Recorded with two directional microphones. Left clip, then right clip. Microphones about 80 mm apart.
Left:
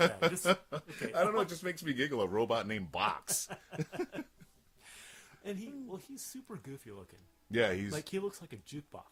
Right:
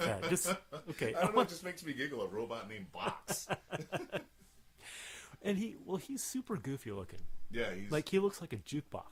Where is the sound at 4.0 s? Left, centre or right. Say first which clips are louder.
Left 8 dB; left.